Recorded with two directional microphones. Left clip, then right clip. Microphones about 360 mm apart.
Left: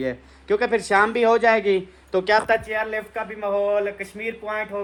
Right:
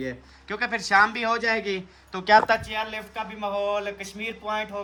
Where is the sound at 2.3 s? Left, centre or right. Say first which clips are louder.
Right 2 dB; centre.